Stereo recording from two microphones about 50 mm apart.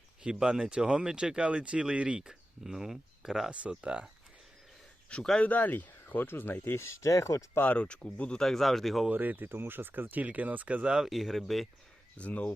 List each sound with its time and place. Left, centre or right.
0.2 s speech: centre
3.7 s speech: right
5.4 s speech: left
6.7 s speech: left
7.8 s speech: left
8.4 s speech: centre
9.0 s speech: right
11.0 s speech: centre
12.1 s speech: left